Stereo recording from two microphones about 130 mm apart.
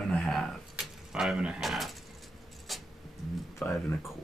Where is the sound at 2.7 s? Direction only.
Centre (ahead or behind).